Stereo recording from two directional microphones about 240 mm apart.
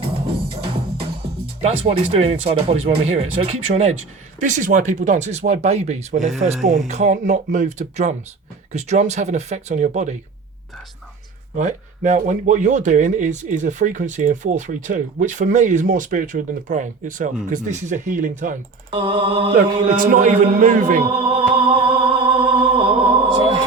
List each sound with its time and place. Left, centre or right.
1.6 s speech: right
11.5 s speech: right
20.0 s music: right